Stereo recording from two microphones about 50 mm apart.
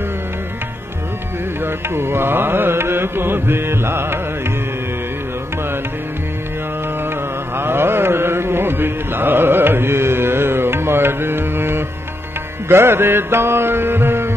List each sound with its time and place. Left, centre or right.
1.6 s music: right
7.5 s music: right